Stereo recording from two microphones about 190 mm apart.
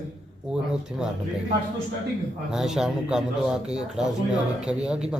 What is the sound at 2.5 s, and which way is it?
Speech, centre (ahead or behind).